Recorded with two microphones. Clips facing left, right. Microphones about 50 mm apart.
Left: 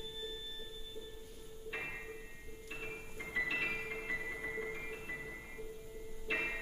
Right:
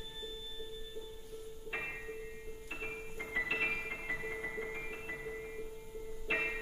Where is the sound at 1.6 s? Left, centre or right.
Centre.